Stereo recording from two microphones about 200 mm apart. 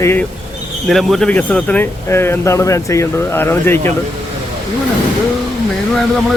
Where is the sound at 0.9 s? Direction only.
Centre (ahead or behind).